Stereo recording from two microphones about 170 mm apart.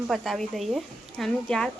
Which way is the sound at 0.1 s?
Centre (ahead or behind).